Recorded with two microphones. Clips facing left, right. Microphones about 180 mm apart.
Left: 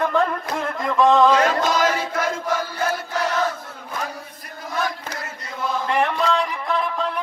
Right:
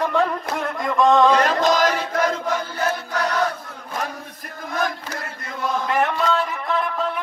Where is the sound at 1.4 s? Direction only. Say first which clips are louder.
Right 1 dB; 50° right (ahead or behind).